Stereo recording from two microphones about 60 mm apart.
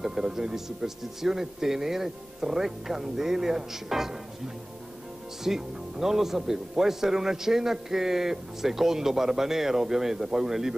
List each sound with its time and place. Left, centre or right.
0.0 s a man's voice: centre
5.4 s a man's voice: centre